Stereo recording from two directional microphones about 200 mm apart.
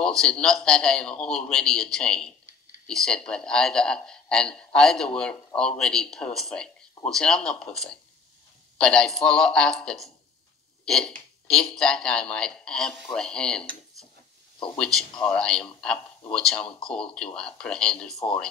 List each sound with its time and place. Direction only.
0.0 s a man's voice: 5° left (ahead or behind)
14.8 s a man's voice: 5° left (ahead or behind)